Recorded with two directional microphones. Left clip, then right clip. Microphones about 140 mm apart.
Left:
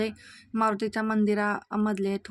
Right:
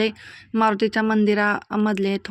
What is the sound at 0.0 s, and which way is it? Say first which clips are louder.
Speech: right 8 dB; 20° right (ahead or behind).